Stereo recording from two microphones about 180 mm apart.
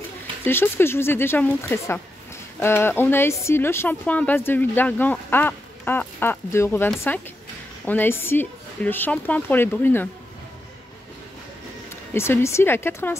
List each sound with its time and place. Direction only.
0.4 s speech: 10° left (ahead or behind)
11.9 s speech: 15° left (ahead or behind)